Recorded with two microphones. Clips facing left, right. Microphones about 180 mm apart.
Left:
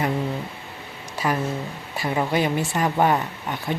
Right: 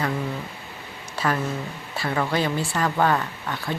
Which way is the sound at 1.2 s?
15° left (ahead or behind).